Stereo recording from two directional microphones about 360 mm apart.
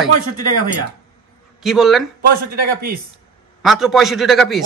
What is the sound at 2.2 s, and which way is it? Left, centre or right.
Speech, right.